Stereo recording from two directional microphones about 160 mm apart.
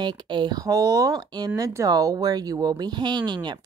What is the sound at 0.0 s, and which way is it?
Speech, 30° right (ahead or behind).